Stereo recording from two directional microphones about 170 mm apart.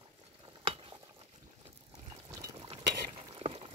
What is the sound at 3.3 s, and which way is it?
Water, 35° right (ahead or behind).